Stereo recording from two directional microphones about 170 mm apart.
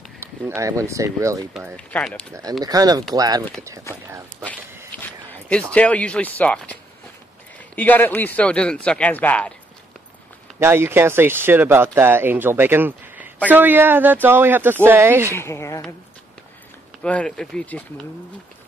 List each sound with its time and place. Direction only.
0.6 s speech: 20° right (ahead or behind)
1.9 s speech: 10° left (ahead or behind)
2.6 s speech: 20° right (ahead or behind)
4.9 s speech: 10° left (ahead or behind)
10.6 s speech: 15° right (ahead or behind)
15.3 s speech: 15° left (ahead or behind)
17.0 s speech: 5° left (ahead or behind)